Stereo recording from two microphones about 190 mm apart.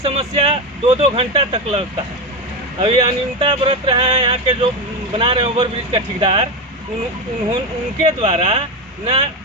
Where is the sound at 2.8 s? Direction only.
25° right (ahead or behind).